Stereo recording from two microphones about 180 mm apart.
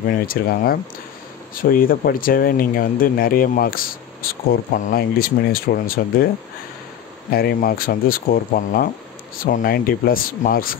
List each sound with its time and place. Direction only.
0.0 s speech: 55° left (ahead or behind)
7.2 s speech: 55° left (ahead or behind)